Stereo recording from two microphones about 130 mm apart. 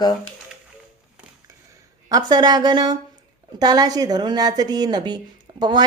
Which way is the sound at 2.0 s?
30° right (ahead or behind).